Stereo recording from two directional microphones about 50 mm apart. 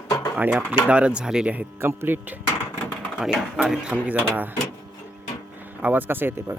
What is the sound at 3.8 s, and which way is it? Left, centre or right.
Speech, right.